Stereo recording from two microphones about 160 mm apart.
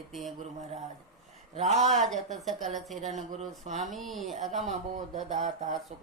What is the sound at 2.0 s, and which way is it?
Speech, centre (ahead or behind).